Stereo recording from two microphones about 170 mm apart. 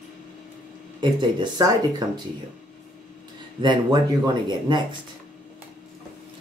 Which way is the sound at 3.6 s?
25° right (ahead or behind).